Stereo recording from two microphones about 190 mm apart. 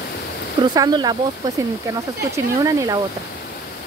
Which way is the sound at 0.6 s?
20° right (ahead or behind).